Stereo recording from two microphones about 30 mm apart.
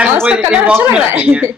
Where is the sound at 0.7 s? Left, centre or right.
Right.